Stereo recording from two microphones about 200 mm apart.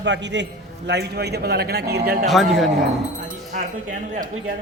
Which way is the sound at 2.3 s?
Centre (ahead or behind).